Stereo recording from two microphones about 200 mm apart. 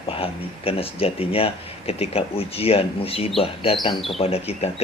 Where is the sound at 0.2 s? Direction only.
30° left (ahead or behind).